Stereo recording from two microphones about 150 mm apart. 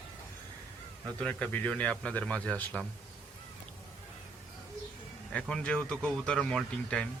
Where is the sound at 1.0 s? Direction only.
10° left (ahead or behind).